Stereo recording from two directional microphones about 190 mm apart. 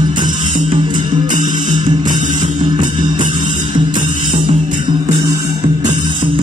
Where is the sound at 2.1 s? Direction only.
40° right (ahead or behind).